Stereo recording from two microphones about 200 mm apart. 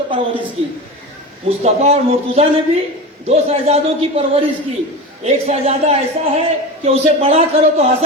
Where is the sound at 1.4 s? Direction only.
30° right (ahead or behind).